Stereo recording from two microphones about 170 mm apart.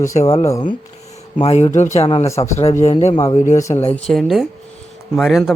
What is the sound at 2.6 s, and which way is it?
Speech, 40° left (ahead or behind).